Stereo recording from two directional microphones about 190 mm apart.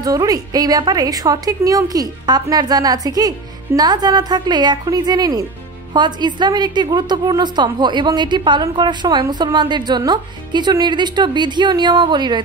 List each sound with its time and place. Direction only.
0.0 s a woman's voice: 20° right (ahead or behind)